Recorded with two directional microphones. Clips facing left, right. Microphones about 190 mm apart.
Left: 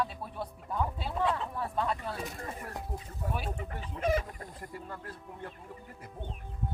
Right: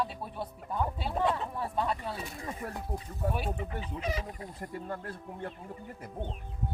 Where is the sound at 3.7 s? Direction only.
50° left (ahead or behind).